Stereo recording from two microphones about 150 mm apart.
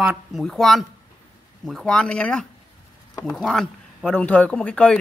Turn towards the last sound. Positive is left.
turn(degrees=5)  # may be behind; listen again after turning